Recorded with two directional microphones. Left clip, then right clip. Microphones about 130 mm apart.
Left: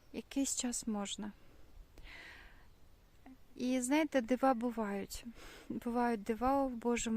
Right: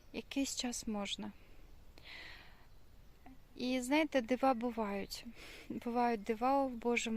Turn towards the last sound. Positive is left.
turn(degrees=50)  # may be behind; listen again after turning